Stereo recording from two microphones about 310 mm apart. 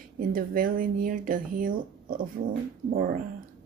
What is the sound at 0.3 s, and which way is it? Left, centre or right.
Speech, right.